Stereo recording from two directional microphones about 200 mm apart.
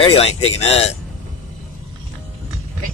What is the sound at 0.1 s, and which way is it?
Speech, 30° left (ahead or behind).